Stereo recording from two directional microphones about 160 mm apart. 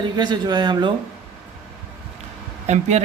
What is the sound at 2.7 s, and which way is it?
Speech, 45° right (ahead or behind).